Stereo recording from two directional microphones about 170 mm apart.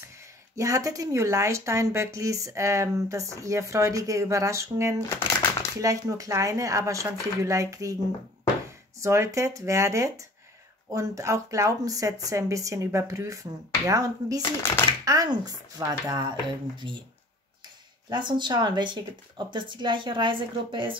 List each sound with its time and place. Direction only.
0.6 s speech: 20° right (ahead or behind)
9.0 s speech: 15° right (ahead or behind)
18.1 s speech: 25° right (ahead or behind)